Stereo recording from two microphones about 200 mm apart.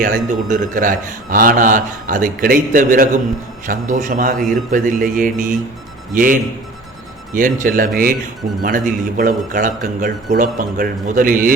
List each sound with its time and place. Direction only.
0.0 s a man's voice: 40° right (ahead or behind)